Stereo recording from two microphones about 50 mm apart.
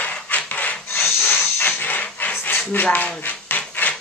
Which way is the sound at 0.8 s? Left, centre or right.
Left.